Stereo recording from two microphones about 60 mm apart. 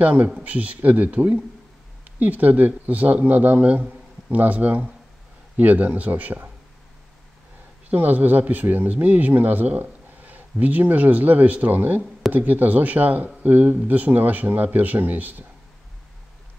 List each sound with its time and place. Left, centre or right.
0.0 s speech: right
7.9 s speech: right